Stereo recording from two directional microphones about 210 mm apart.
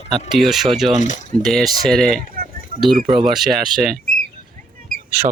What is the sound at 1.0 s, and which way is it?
Speech, 35° left (ahead or behind).